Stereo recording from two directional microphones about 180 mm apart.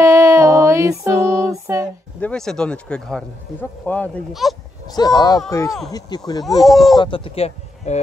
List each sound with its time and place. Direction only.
0.0 s music: 15° right (ahead or behind)
2.1 s speech: 5° left (ahead or behind)
4.9 s speech: 20° left (ahead or behind)
6.6 s speech: centre (ahead or behind)
7.0 s speech: 30° left (ahead or behind)